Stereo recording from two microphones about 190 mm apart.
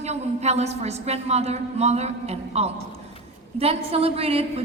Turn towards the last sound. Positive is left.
turn(degrees=-30)  # may be behind; listen again after turning